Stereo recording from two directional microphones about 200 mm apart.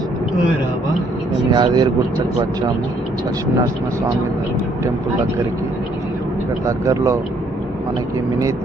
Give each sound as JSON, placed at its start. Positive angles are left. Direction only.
{"t": 1.5, "sound": "speech", "side_deg": -20}
{"t": 6.7, "sound": "speech", "side_deg": -15}